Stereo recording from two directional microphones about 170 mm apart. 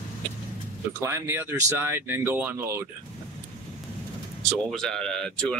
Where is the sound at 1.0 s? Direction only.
15° right (ahead or behind).